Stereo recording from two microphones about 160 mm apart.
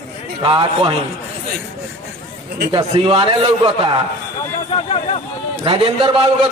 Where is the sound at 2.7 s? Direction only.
30° right (ahead or behind).